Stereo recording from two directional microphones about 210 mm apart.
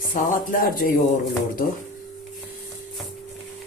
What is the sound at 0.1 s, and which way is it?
Speech, 40° left (ahead or behind).